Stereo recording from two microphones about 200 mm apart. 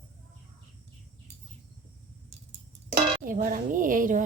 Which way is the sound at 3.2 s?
45° right (ahead or behind).